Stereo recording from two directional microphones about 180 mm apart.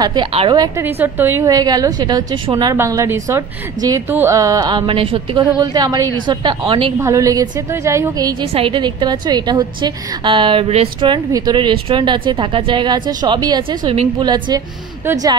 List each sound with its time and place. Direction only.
0.0 s a woman's voice: 25° right (ahead or behind)
0.6 s a woman's voice: 15° right (ahead or behind); by 6.9 s 30° right (ahead or behind)
7.0 s a woman's voice: 15° right (ahead or behind)